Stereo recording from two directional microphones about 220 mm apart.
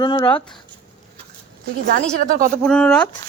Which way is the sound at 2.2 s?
40° right (ahead or behind).